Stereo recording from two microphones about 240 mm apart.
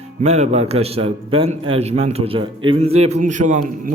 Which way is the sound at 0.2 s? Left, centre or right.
Right.